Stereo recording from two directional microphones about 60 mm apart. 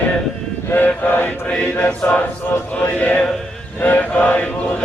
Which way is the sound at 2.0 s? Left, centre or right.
Left.